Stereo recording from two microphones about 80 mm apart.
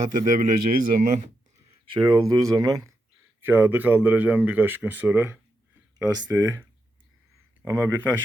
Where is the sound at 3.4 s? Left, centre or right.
Right.